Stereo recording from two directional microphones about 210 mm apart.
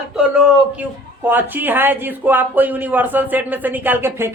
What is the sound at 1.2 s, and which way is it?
Speech, 10° right (ahead or behind).